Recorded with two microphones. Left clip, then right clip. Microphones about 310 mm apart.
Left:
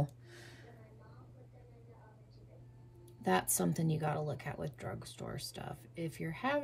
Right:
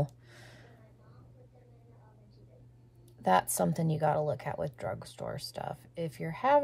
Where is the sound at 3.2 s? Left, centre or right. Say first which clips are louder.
Right 7 dB; centre.